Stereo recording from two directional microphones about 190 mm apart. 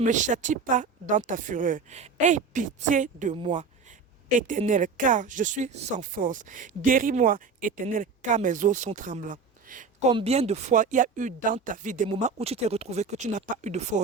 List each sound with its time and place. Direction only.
0.0 s speech: 40° right (ahead or behind)
10.1 s speech: 30° right (ahead or behind)
12.0 s speech: 30° right (ahead or behind)